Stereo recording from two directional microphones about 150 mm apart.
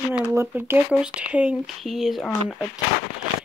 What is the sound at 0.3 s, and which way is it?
Speech, 15° right (ahead or behind).